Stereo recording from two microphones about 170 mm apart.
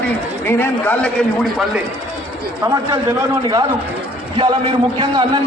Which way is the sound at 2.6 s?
20° right (ahead or behind).